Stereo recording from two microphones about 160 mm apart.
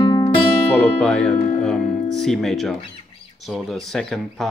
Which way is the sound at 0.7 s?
5° left (ahead or behind).